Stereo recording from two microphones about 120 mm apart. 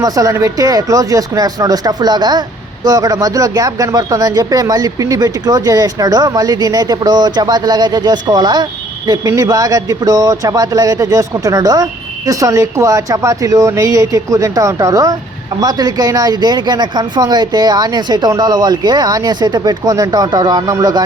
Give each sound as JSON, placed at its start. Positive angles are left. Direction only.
{"t": 0.0, "sound": "speech", "side_deg": -30}